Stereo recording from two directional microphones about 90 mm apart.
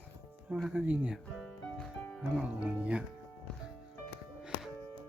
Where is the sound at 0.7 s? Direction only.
10° right (ahead or behind).